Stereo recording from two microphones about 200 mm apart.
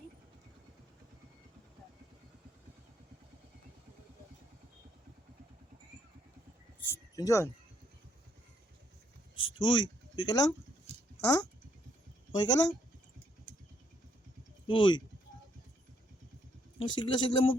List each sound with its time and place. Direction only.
6.9 s speech: 15° left (ahead or behind)
9.6 s speech: 20° left (ahead or behind)
14.7 s speech: 25° left (ahead or behind)
16.8 s speech: 25° left (ahead or behind)